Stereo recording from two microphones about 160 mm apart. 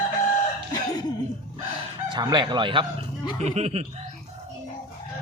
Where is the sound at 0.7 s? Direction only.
25° left (ahead or behind).